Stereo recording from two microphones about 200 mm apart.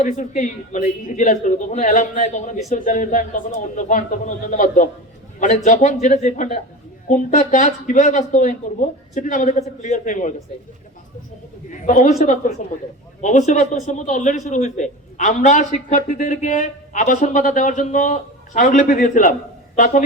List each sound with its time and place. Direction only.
0.0 s a man's voice: 40° left (ahead or behind)
11.7 s a man's voice: 40° left (ahead or behind)